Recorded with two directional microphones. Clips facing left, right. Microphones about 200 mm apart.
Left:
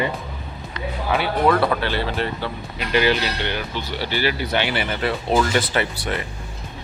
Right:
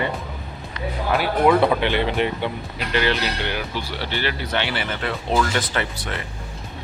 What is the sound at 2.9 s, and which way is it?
Speech, 10° left (ahead or behind).